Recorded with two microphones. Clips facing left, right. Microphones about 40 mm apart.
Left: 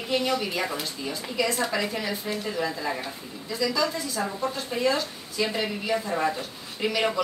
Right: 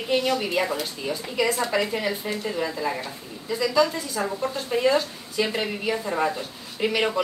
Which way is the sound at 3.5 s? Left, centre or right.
Centre.